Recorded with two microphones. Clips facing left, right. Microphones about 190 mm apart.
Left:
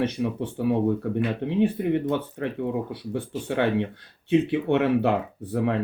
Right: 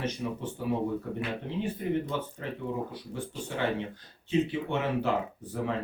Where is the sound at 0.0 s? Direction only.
60° left (ahead or behind).